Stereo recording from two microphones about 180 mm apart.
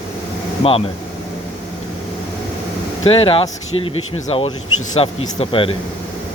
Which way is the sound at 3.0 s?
30° left (ahead or behind).